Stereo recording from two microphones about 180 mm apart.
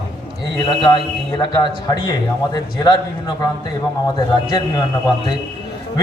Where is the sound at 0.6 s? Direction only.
25° left (ahead or behind).